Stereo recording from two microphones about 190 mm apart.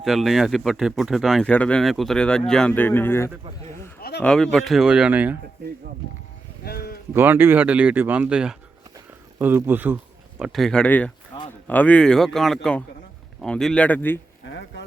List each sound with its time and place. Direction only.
0.0 s speech: centre (ahead or behind)
6.7 s sheep: 55° left (ahead or behind)
7.1 s speech: 10° right (ahead or behind); by 14.2 s 10° left (ahead or behind)